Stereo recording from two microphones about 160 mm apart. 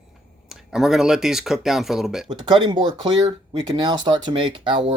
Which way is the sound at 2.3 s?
30° right (ahead or behind).